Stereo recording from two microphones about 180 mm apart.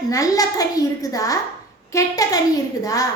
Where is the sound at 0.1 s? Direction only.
20° left (ahead or behind).